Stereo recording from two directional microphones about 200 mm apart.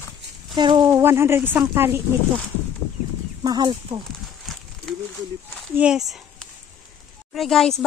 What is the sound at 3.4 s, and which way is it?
Speech, 20° right (ahead or behind).